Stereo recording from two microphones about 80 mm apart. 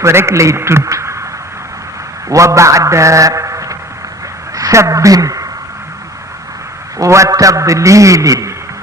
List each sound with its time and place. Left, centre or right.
0.0 s a man's voice: right
2.3 s a man's voice: right
7.0 s a man's voice: right